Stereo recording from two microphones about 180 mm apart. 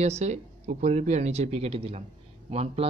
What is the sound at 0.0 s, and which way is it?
Speech, 40° right (ahead or behind).